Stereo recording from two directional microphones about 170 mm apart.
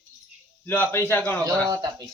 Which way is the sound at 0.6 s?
10° left (ahead or behind).